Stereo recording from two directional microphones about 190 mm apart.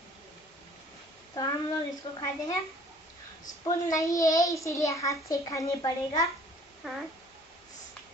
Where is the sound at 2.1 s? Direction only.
20° left (ahead or behind).